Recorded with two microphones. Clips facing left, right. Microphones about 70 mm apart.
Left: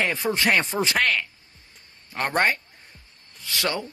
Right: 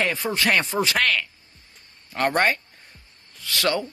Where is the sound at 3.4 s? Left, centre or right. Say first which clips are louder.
Right 3 dB; centre.